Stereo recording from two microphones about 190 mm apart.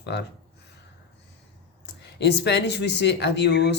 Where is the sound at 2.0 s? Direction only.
60° left (ahead or behind).